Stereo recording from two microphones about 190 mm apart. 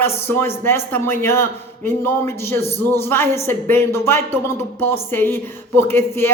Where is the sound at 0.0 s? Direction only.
10° left (ahead or behind).